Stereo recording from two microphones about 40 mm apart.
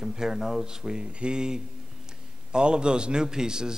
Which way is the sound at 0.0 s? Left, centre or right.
Centre.